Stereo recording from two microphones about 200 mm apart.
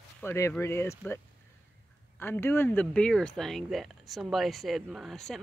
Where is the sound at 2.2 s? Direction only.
10° left (ahead or behind).